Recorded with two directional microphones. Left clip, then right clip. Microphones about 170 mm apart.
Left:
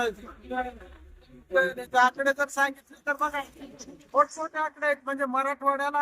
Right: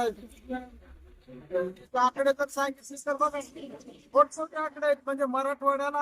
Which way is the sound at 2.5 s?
10° right (ahead or behind).